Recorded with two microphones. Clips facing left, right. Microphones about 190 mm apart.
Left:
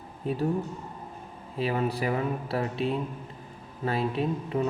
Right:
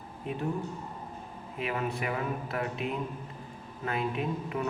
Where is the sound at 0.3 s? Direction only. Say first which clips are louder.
Left 5 dB; 35° left (ahead or behind).